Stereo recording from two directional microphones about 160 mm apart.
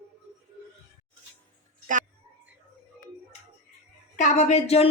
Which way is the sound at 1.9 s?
55° right (ahead or behind).